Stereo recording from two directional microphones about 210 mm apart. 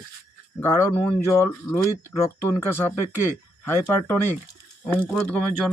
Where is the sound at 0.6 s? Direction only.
10° left (ahead or behind).